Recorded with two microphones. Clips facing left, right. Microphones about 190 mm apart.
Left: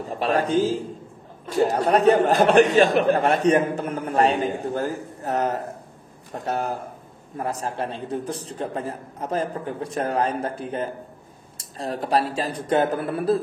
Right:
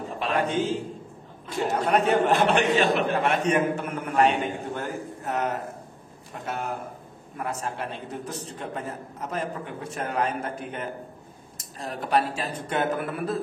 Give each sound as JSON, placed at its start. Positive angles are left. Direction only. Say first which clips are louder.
{"t": 0.1, "sound": "a man's voice", "louder": "left 5 dB", "side_deg": 40}